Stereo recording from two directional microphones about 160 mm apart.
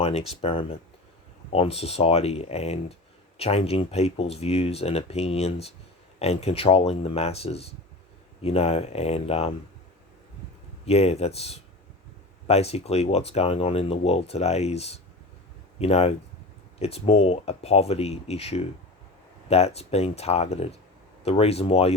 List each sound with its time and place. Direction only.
0.0 s speech: 40° left (ahead or behind)
10.8 s speech: 40° left (ahead or behind)